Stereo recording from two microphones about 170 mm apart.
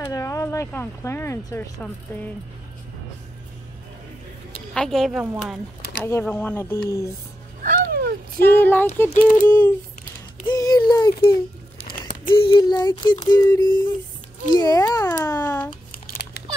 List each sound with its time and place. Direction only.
0.1 s speech: 15° left (ahead or behind)
4.6 s speech: 5° left (ahead or behind)
5.2 s speech: 10° right (ahead or behind)
6.0 s speech: 15° left (ahead or behind)
7.6 s a sound: 60° right (ahead or behind)
8.4 s speech: 10° left (ahead or behind)
9.1 s speech: 50° left (ahead or behind)
9.5 s speech: 10° left (ahead or behind)
13.6 s speech: 90° left
14.5 s speech: 25° left (ahead or behind)
15.0 s a sound: 20° left (ahead or behind)